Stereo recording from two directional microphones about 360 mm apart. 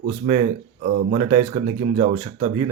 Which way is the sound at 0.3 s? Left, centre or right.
Centre.